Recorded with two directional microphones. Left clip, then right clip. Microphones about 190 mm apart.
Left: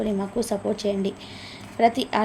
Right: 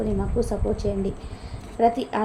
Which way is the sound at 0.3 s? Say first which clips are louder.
Right 1 dB; 15° left (ahead or behind).